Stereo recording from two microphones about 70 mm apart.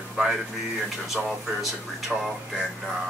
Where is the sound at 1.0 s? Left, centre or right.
Centre.